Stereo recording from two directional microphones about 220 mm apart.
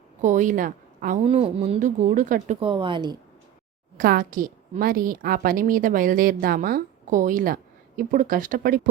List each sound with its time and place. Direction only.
0.2 s a woman's voice: 35° right (ahead or behind)
3.9 s a woman's voice: 40° right (ahead or behind)